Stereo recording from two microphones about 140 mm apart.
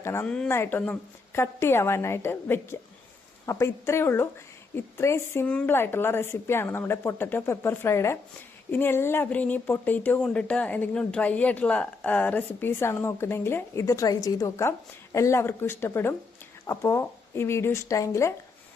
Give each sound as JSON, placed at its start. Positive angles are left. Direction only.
{"t": 0.0, "sound": "speech", "side_deg": 20}
{"t": 0.3, "sound": "speech", "side_deg": 5}